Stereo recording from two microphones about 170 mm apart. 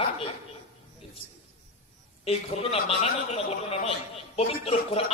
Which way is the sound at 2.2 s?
35° left (ahead or behind).